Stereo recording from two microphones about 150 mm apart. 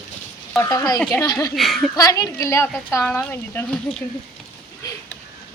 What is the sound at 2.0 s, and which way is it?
A woman's voice, 25° left (ahead or behind).